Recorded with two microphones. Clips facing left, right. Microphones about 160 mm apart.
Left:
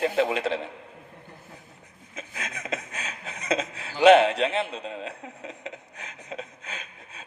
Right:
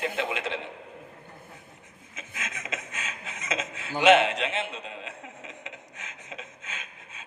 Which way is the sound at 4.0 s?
35° left (ahead or behind).